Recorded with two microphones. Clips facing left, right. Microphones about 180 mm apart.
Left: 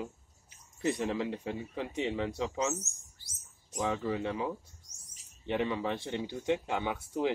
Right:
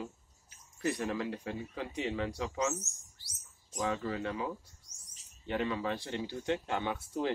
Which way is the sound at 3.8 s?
20° left (ahead or behind).